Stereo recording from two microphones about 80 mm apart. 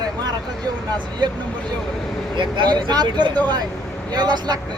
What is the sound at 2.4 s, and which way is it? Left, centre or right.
Speech, right.